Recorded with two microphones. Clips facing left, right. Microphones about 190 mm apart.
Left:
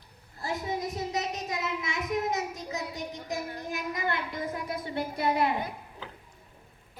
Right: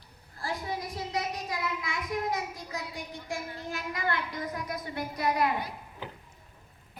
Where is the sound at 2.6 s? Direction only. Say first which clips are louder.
Left 3 dB; 20° left (ahead or behind).